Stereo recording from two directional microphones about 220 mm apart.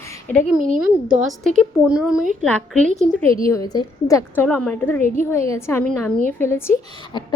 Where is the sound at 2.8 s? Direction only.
35° right (ahead or behind).